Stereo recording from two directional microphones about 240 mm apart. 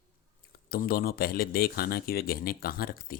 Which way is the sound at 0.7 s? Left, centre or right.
Left.